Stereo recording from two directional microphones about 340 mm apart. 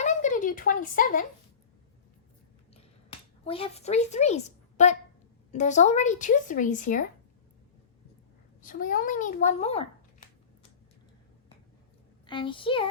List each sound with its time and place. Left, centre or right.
0.0 s a sound: left
3.4 s a woman's voice: centre
8.6 s a child's voice: left
12.2 s a woman's voice: centre